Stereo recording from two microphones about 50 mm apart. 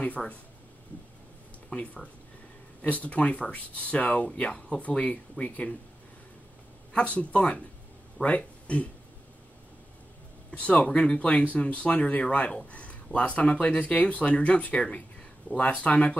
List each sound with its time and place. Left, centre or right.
0.2 s speech: centre
1.7 s speech: left
6.9 s speech: left
10.5 s speech: left